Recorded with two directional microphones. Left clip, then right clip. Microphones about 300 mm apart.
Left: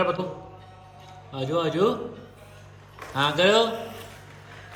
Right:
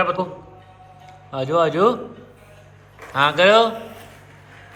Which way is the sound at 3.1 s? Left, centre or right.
Centre.